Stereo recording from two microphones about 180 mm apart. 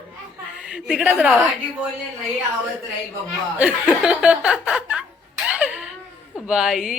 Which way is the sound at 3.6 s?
5° right (ahead or behind).